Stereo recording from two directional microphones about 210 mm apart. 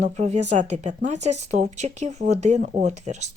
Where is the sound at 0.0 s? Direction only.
35° right (ahead or behind).